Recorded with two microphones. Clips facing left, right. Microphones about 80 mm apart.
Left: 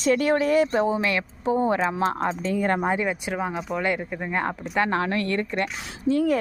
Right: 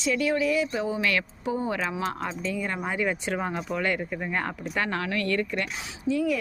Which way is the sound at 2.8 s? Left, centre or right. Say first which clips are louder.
Left 4 dB; left.